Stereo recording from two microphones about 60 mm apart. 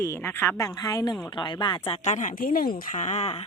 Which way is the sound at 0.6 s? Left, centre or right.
Left.